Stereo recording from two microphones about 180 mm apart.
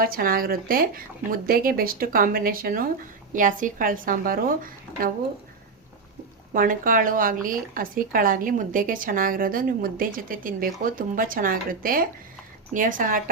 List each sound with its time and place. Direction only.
0.0 s speech: 55° right (ahead or behind)
6.5 s speech: 50° right (ahead or behind)